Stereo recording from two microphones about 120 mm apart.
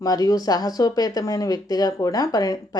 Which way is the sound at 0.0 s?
30° left (ahead or behind).